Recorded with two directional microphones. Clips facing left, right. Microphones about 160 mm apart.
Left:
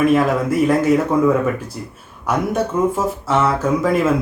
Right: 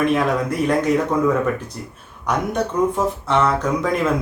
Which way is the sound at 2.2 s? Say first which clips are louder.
Left 2 dB; 5° left (ahead or behind).